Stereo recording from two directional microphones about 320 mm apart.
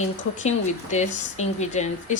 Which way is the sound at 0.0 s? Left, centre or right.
Left.